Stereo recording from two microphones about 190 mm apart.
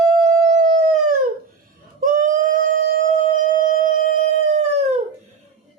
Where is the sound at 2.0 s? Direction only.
45° right (ahead or behind).